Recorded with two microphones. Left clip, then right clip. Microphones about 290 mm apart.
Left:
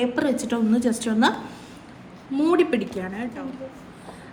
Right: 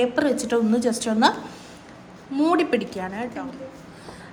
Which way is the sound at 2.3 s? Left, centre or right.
Centre.